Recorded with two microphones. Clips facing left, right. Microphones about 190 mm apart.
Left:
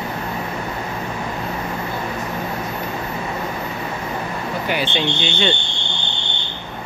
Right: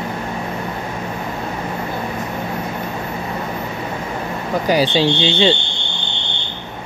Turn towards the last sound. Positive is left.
turn(degrees=-30)  # may be behind; listen again after turning